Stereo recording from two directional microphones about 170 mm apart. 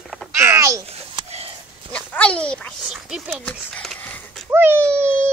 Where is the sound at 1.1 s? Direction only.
35° right (ahead or behind).